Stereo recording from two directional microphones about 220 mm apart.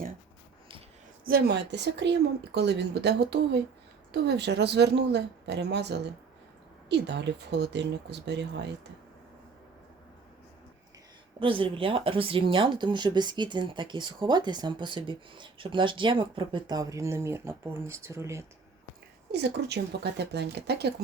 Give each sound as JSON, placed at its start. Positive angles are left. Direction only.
{"t": 1.2, "sound": "a woman's voice", "side_deg": -45}
{"t": 11.3, "sound": "speech", "side_deg": -25}
{"t": 19.3, "sound": "a woman's voice", "side_deg": -50}